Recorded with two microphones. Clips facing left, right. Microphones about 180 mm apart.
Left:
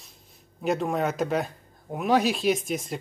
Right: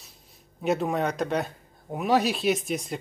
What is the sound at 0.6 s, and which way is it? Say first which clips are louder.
Speech: even; centre (ahead or behind).